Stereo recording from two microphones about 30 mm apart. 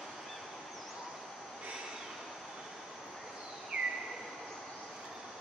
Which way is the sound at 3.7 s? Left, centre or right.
Right.